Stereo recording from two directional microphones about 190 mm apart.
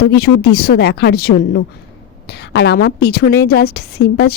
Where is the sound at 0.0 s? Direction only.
55° left (ahead or behind).